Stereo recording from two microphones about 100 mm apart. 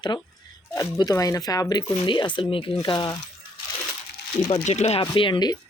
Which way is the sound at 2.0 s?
50° left (ahead or behind).